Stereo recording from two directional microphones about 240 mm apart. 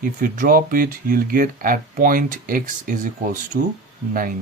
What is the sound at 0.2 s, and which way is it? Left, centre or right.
Speech, right.